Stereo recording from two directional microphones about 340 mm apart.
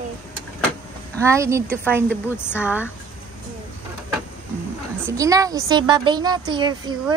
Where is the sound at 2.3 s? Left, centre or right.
Centre.